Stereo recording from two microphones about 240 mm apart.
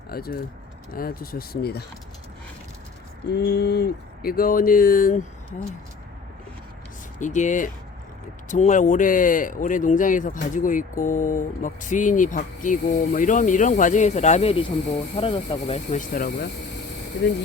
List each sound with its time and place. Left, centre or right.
0.1 s speech: left
3.3 s speech: left
7.2 s speech: left